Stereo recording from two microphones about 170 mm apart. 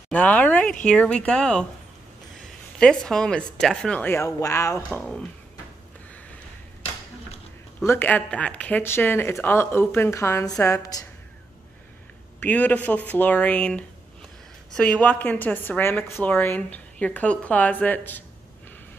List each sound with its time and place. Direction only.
0.1 s a sound: 10° left (ahead or behind)
0.8 s speech: 5° left (ahead or behind)
4.8 s speech: 5° left (ahead or behind)
7.8 s a woman's voice: 15° left (ahead or behind)
12.4 s a woman's voice: 10° left (ahead or behind)